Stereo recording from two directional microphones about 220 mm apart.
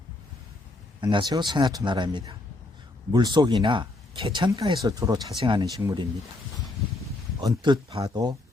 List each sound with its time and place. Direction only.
1.0 s speech: 20° right (ahead or behind)
7.4 s speech: 20° right (ahead or behind)